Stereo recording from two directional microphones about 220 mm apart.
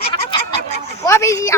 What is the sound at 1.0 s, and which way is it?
Speech, 15° left (ahead or behind).